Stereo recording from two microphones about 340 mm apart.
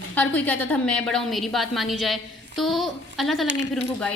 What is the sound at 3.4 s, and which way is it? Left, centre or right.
Speech, right.